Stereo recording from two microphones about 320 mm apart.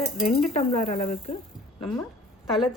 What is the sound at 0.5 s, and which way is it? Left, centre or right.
Speech, left.